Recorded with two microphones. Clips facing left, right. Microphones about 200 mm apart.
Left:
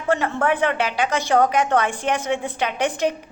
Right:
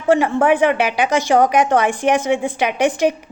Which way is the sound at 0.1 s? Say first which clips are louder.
Right 6 dB; 15° right (ahead or behind).